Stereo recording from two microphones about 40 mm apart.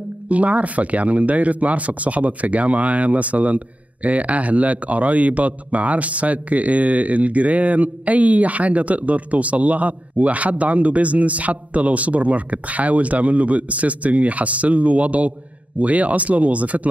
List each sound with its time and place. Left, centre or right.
0.3 s speech: right